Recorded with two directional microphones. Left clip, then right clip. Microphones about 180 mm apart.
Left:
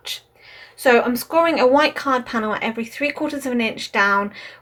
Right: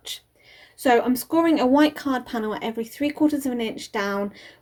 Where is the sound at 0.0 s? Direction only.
55° right (ahead or behind).